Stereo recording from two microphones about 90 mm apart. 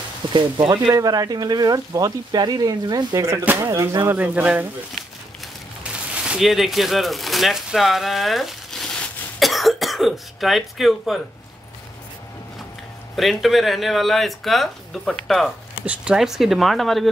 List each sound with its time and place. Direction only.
0.3 s speech: 60° right (ahead or behind)
0.9 s speech: 45° right (ahead or behind)
3.2 s speech: 30° right (ahead or behind)
4.1 s speech: 20° right (ahead or behind)
5.9 s speech: 10° right (ahead or behind)
13.1 s speech: centre (ahead or behind)
15.8 s speech: 15° right (ahead or behind)